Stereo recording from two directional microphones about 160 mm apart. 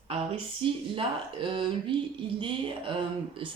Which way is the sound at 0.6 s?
35° right (ahead or behind).